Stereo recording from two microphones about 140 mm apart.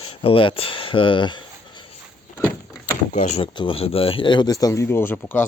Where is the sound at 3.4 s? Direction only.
40° left (ahead or behind).